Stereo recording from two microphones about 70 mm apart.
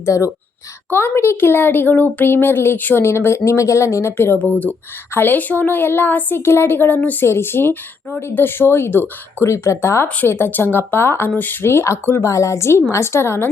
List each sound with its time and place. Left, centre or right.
0.0 s speech: left
0.9 s speech: left
7.3 s speech: left